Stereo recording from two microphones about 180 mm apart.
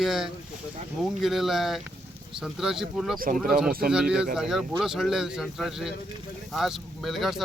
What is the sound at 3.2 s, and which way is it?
Speech, 50° right (ahead or behind).